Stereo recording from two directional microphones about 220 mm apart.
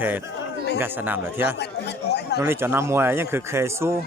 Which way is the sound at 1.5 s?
50° left (ahead or behind).